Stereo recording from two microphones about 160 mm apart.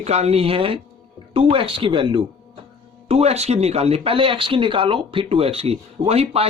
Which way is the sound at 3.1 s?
40° right (ahead or behind).